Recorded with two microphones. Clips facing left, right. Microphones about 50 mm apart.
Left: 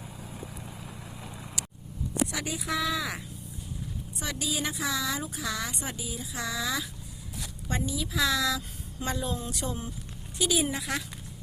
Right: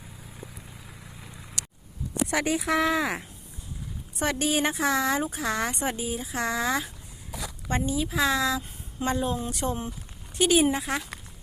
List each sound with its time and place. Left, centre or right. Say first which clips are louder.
2.3 s a woman's voice: right 7 dB; right